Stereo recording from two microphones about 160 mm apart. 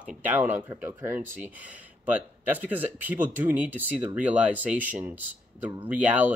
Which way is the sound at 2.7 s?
10° right (ahead or behind).